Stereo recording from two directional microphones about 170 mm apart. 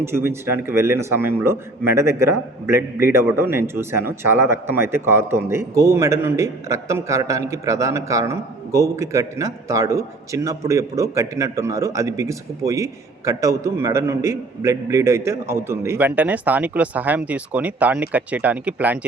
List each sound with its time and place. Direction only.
0.0 s a man's voice: 15° right (ahead or behind)